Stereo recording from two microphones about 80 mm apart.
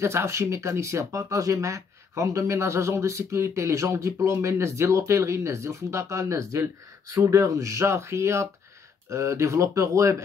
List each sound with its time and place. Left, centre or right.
0.0 s speech: right